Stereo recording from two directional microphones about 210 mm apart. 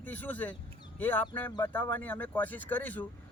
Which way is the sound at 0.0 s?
10° left (ahead or behind).